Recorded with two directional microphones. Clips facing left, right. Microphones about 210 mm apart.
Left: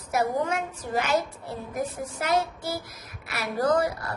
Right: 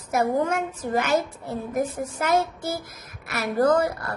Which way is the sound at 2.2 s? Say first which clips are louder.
Right 3 dB; 50° right (ahead or behind).